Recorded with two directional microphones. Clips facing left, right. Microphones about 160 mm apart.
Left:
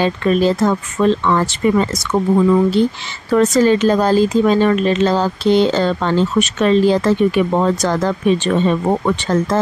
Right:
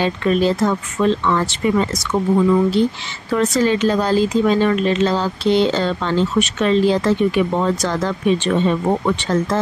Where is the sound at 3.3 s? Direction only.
45° left (ahead or behind).